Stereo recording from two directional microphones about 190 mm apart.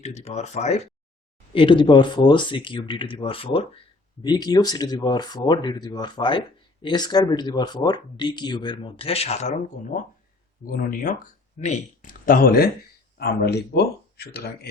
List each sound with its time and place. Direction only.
0.0 s speech: 35° left (ahead or behind)
1.5 s speech: 25° left (ahead or behind); by 14.7 s 55° left (ahead or behind)